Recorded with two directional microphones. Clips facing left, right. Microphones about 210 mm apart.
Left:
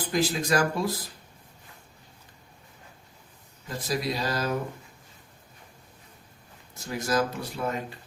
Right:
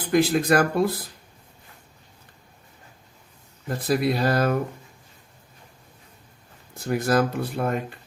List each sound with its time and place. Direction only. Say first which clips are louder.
0.1 s speech: right 7 dB; 55° right (ahead or behind)
3.7 s speech: right 7 dB; 55° right (ahead or behind)
6.7 s speech: right 5 dB; 55° right (ahead or behind)